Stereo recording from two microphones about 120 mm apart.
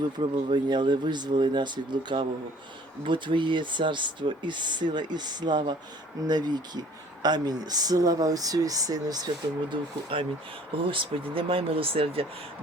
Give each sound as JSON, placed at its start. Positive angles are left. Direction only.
{"t": 0.2, "sound": "speech", "side_deg": -40}
{"t": 10.1, "sound": "speech", "side_deg": -50}